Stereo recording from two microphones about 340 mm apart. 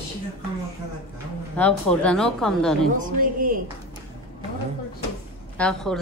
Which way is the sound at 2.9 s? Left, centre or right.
Right.